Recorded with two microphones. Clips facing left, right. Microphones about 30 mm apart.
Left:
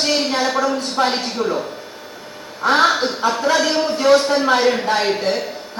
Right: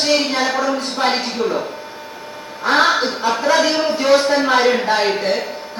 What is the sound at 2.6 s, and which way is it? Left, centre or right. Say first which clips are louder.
Speech: even; centre.